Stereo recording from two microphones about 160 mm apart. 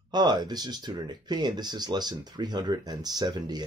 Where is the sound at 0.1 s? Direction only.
25° right (ahead or behind).